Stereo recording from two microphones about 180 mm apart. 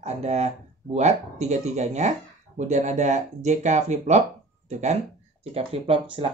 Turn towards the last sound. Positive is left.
turn(degrees=-30)  # may be behind; listen again after turning